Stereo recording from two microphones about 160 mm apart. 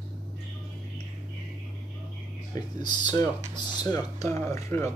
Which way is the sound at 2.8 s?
25° left (ahead or behind).